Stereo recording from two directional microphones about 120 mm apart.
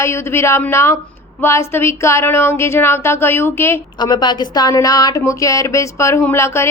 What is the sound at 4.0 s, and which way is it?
A woman's voice, 35° left (ahead or behind).